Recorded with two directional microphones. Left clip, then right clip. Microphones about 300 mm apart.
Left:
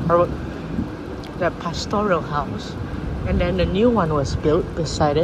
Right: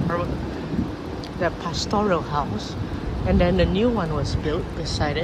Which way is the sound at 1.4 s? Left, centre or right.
Centre.